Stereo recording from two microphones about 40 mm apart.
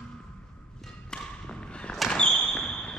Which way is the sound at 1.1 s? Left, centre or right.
Left.